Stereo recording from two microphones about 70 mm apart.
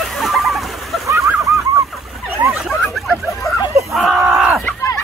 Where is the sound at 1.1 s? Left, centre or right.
Right.